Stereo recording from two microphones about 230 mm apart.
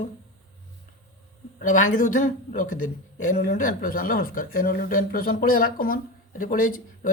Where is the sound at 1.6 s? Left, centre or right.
Left.